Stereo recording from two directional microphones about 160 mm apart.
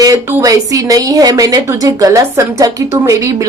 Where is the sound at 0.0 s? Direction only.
20° right (ahead or behind).